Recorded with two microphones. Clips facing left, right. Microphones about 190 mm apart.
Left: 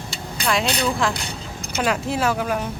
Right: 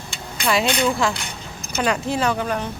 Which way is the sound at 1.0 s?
Centre (ahead or behind).